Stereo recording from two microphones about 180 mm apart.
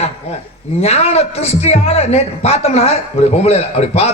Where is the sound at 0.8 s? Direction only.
35° left (ahead or behind).